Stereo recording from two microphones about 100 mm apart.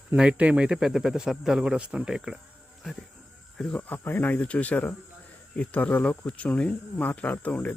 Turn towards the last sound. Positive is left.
turn(degrees=15)  # may be behind; listen again after turning